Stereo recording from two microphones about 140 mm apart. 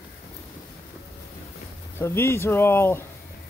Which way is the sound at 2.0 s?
15° left (ahead or behind).